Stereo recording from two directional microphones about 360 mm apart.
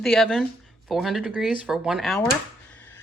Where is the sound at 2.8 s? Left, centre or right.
Centre.